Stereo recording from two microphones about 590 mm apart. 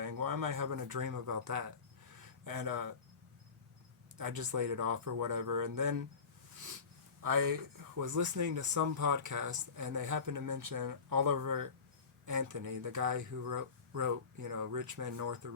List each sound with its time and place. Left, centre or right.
0.0 s speech: right
4.2 s speech: right
7.2 s speech: right